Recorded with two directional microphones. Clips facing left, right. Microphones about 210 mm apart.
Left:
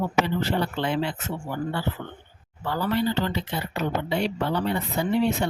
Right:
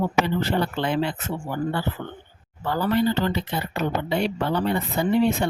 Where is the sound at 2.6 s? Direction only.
50° right (ahead or behind).